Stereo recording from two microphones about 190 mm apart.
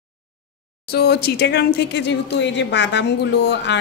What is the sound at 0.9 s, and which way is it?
A woman's voice, 55° left (ahead or behind).